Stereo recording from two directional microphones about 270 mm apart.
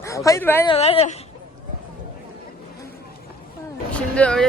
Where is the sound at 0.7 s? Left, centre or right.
Left.